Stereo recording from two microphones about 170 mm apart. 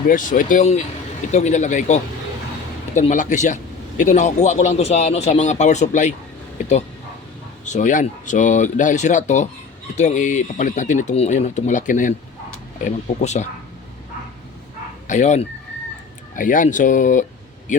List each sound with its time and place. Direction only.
0.1 s a man's voice: 50° left (ahead or behind)
7.6 s a man's voice: 45° left (ahead or behind)
15.0 s a man's voice: 45° left (ahead or behind)